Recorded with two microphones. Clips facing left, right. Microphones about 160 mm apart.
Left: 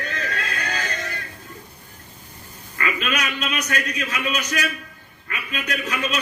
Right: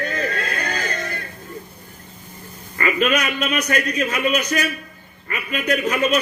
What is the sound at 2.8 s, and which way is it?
A man's voice, 45° right (ahead or behind).